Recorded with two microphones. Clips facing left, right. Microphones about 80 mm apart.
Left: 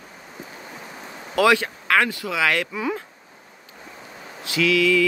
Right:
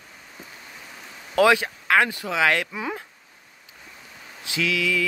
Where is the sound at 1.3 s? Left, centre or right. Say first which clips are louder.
Even; right.